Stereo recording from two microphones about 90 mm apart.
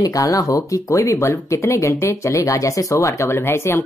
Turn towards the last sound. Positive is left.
turn(degrees=30)  # may be behind; listen again after turning